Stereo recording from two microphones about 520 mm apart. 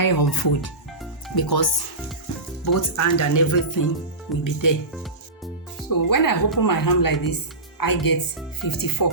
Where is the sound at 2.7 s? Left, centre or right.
Left.